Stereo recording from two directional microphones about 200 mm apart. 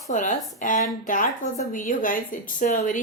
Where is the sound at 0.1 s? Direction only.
40° left (ahead or behind).